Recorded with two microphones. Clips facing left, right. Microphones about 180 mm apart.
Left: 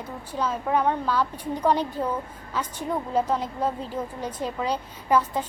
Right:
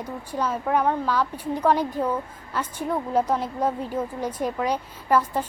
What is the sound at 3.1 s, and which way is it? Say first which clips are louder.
A woman's voice: right 1 dB; 10° right (ahead or behind).